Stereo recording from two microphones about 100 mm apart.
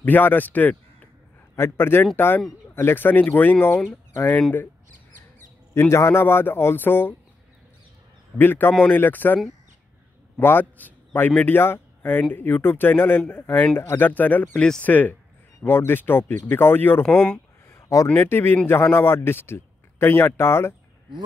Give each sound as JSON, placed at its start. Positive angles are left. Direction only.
{"t": 0.0, "sound": "a man's voice", "side_deg": 20}
{"t": 4.4, "sound": "speech", "side_deg": 15}
{"t": 5.8, "sound": "a man's voice", "side_deg": 30}
{"t": 8.4, "sound": "a man's voice", "side_deg": 20}
{"t": 10.4, "sound": "a man's voice", "side_deg": 20}
{"t": 17.6, "sound": "a sound", "side_deg": 30}
{"t": 18.1, "sound": "a man's voice", "side_deg": 20}